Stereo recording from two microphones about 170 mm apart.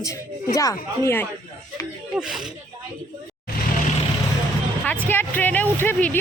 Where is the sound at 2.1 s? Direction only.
5° right (ahead or behind).